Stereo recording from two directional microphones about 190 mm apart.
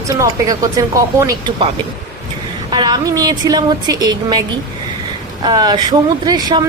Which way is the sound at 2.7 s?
20° right (ahead or behind).